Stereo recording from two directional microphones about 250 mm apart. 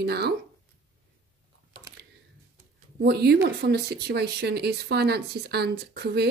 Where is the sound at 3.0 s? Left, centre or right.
Right.